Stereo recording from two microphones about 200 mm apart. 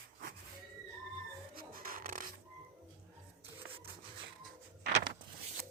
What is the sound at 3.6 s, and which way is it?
Rub, 75° right (ahead or behind).